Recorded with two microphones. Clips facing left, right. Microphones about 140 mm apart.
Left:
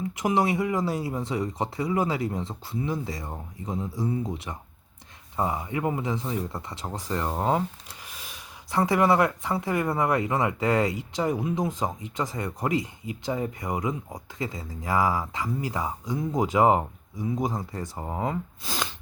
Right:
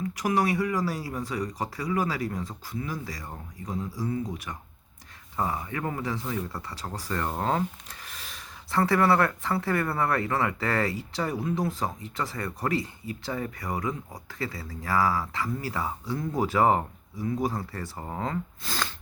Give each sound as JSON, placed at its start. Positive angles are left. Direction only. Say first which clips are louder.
{"t": 0.1, "sound": "speech", "louder": "left 2 dB", "side_deg": 20}